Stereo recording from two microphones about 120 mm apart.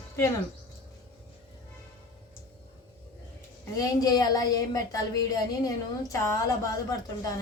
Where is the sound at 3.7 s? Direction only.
30° left (ahead or behind).